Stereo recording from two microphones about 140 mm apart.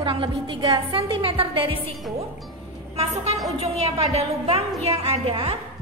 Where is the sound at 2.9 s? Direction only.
50° right (ahead or behind).